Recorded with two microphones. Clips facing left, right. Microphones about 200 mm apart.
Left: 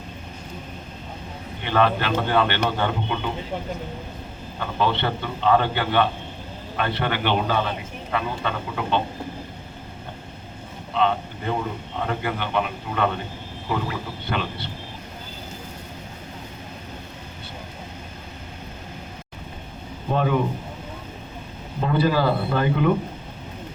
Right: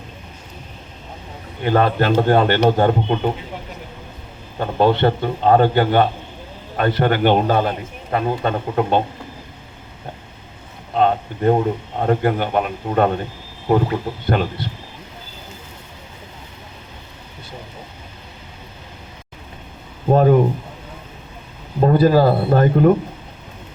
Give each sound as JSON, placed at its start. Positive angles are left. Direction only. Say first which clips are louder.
{"t": 1.6, "sound": "a man's voice", "louder": "right 5 dB", "side_deg": -45}
{"t": 4.6, "sound": "a man's voice", "louder": "right 8 dB", "side_deg": -45}
{"t": 10.9, "sound": "a man's voice", "louder": "right 5 dB", "side_deg": -45}
{"t": 20.1, "sound": "a sound", "louder": "right 9 dB", "side_deg": -45}
{"t": 21.8, "sound": "speech", "louder": "right 8 dB", "side_deg": -45}